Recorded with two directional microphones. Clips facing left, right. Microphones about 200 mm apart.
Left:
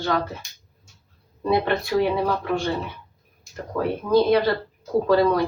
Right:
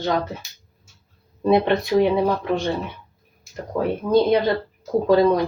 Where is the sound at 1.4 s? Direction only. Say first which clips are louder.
Right 4 dB; 20° right (ahead or behind).